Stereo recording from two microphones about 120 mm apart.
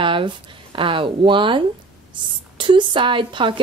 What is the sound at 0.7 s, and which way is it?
A woman's voice, 45° right (ahead or behind).